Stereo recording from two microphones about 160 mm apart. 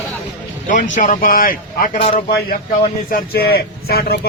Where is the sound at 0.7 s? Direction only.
55° left (ahead or behind).